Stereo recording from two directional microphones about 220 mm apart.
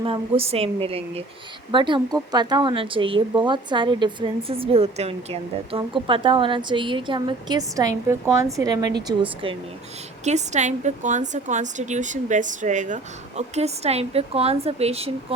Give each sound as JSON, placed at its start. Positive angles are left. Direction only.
{"t": 0.0, "sound": "a woman's voice", "side_deg": -25}